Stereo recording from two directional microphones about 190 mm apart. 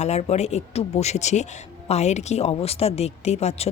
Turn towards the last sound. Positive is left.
turn(degrees=35)  # may be behind; listen again after turning